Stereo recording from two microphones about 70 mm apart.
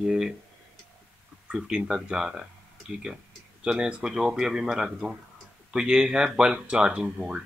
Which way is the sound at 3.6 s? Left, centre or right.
Centre.